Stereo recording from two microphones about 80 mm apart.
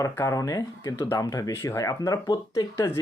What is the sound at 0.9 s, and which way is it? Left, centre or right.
Speech, left.